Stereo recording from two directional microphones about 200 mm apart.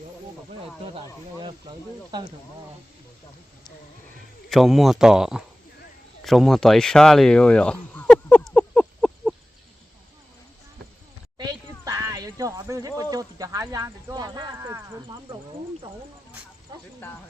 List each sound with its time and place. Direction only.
2.0 s speech: 20° right (ahead or behind)
4.4 s speech: centre (ahead or behind)
6.2 s a sound: centre (ahead or behind)
11.9 s speech: 15° right (ahead or behind)
16.7 s speech: 20° right (ahead or behind)